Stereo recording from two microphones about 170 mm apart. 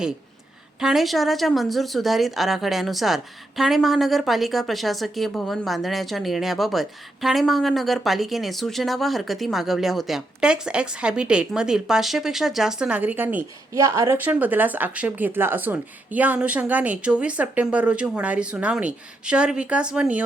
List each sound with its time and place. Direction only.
0.8 s a woman's voice: centre (ahead or behind)